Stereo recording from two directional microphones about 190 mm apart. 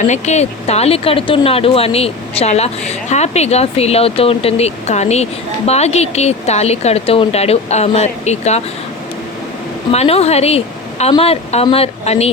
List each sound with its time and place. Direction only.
0.0 s speech: 35° left (ahead or behind)
9.9 s a woman's voice: 35° left (ahead or behind)